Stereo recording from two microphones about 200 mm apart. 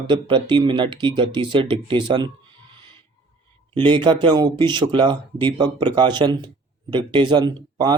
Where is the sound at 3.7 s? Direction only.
25° right (ahead or behind).